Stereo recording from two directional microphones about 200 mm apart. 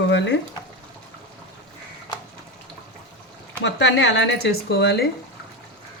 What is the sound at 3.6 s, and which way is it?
Speech, 60° left (ahead or behind).